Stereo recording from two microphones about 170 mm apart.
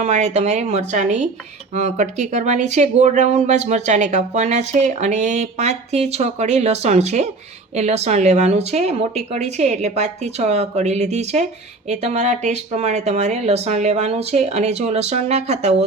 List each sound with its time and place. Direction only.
0.0 s speech: 40° right (ahead or behind)